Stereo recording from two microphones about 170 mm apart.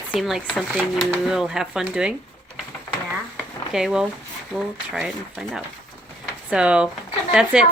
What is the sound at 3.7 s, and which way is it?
Speech, 5° right (ahead or behind).